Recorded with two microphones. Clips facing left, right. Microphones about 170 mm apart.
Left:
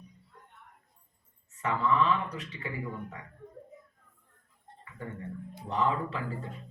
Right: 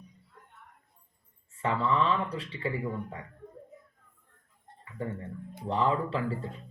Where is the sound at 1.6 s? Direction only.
30° right (ahead or behind).